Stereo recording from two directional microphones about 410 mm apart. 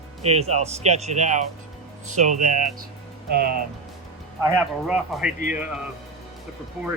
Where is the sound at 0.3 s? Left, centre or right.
Centre.